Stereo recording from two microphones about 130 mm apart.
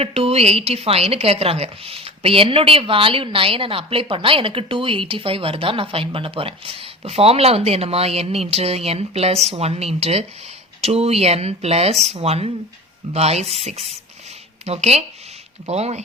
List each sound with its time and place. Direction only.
0.0 s a woman's voice: 50° right (ahead or behind)